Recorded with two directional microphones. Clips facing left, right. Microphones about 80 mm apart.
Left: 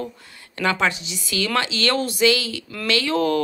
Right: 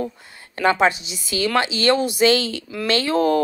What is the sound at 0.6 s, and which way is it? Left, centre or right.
Speech, right.